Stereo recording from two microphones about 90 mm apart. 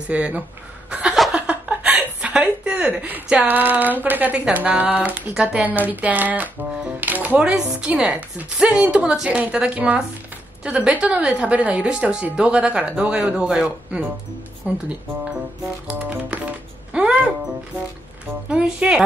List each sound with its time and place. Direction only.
0.1 s speech: 15° right (ahead or behind)
0.8 s chuckle: 10° right (ahead or behind)
1.3 s a sound: 15° right (ahead or behind)
3.0 s speech: 15° right (ahead or behind)
15.9 s speech: 15° right (ahead or behind)
16.9 s music: 10° right (ahead or behind)
18.5 s speech: 10° right (ahead or behind)